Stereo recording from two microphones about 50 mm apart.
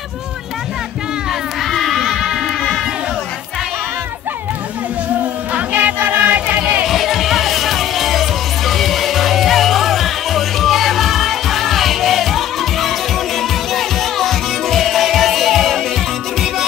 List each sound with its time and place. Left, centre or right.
1.6 s a sound: centre
5.5 s music: right
6.8 s music: centre